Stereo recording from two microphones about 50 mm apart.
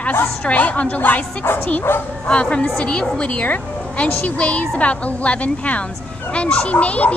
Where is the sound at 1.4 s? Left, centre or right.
Left.